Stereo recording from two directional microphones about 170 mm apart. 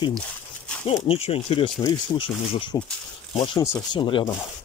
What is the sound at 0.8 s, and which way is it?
Speech, 35° left (ahead or behind).